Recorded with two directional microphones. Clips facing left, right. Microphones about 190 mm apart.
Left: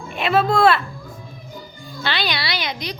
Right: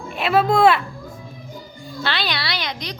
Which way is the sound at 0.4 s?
15° right (ahead or behind).